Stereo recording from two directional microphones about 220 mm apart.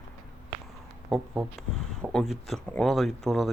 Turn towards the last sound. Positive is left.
turn(degrees=0)  # may be behind; listen again after turning